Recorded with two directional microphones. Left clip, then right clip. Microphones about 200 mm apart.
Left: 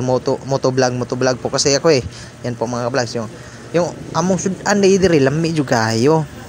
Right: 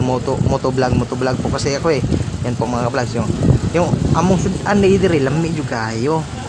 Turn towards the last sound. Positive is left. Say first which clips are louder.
# left 5 dB
turn(degrees=35)  # may be behind; listen again after turning